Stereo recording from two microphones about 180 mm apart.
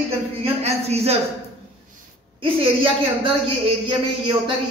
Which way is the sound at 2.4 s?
30° right (ahead or behind).